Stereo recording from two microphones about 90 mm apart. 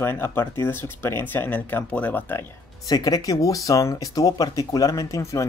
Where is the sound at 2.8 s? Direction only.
40° left (ahead or behind).